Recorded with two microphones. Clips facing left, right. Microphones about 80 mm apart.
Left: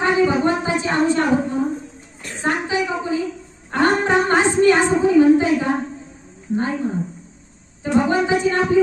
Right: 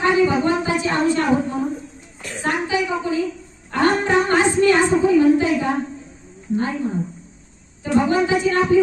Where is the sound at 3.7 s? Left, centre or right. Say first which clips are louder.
Left 1 dB; left.